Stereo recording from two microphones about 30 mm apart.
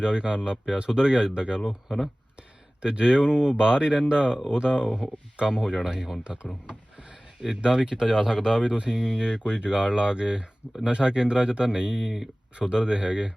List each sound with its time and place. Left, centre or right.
0.0 s speech: right
2.8 s speech: right
6.2 s speech: right; by 8.6 s centre
8.6 s speech: right
9.1 s speech: right